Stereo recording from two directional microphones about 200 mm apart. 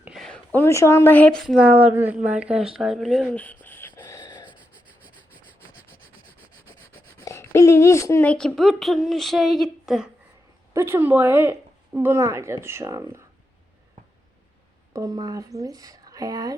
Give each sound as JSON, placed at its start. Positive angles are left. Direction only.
{"t": 0.0, "sound": "speech", "side_deg": 0}
{"t": 2.7, "sound": "a sound", "side_deg": 0}
{"t": 4.4, "sound": "rub", "side_deg": -5}
{"t": 7.3, "sound": "speech", "side_deg": 15}
{"t": 14.9, "sound": "speech", "side_deg": -20}